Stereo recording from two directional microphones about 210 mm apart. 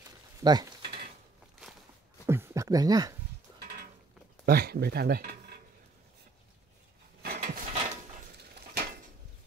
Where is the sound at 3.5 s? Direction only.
50° right (ahead or behind).